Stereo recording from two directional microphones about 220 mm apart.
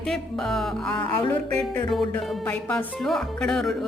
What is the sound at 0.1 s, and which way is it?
Speech, centre (ahead or behind).